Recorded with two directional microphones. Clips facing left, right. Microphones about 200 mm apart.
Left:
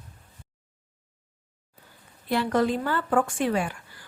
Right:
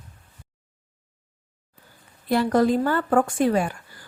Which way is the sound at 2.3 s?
40° right (ahead or behind).